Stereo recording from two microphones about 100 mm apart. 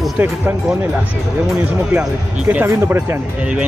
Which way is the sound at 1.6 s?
15° right (ahead or behind).